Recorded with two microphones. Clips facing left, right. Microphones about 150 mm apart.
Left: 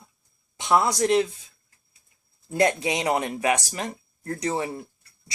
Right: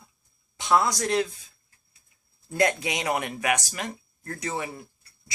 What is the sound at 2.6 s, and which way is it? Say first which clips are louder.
Speech: left 3 dB; 25° left (ahead or behind).